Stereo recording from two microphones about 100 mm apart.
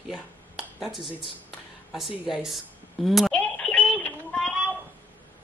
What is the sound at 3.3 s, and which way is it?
Telephone dialing, 10° left (ahead or behind).